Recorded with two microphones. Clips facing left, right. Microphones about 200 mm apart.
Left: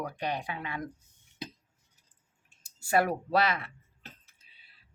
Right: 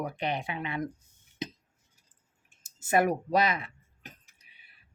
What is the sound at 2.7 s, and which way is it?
Speech, 20° right (ahead or behind).